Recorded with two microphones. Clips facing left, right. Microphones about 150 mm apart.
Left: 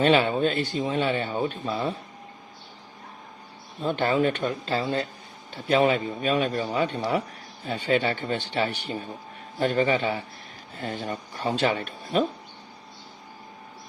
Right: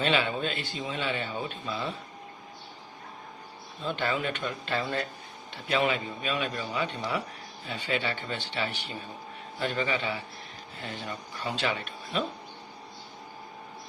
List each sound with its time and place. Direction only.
0.0 s speech: 45° left (ahead or behind)
3.8 s speech: 45° left (ahead or behind); by 5.0 s 30° left (ahead or behind)
5.6 s speech: 40° left (ahead or behind)